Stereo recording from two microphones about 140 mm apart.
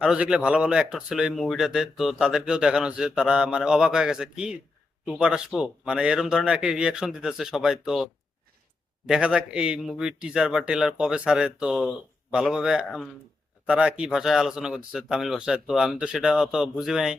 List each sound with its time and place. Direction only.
0.0 s a man's voice: 5° right (ahead or behind)